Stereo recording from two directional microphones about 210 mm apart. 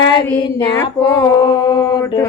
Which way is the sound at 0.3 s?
20° left (ahead or behind).